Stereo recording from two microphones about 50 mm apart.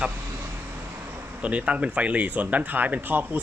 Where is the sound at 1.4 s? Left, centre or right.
Right.